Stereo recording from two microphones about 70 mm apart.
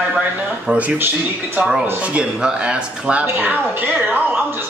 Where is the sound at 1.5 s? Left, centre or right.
Centre.